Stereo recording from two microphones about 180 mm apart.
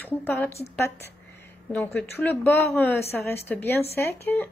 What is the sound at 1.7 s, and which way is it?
A woman's voice, 10° left (ahead or behind).